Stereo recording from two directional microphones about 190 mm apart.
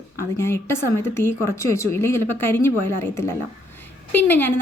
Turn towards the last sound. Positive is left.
turn(degrees=10)  # may be behind; listen again after turning